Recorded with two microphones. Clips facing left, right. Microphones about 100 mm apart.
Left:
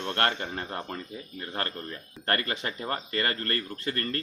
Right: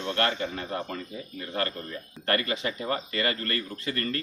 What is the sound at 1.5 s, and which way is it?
Speech, 40° left (ahead or behind).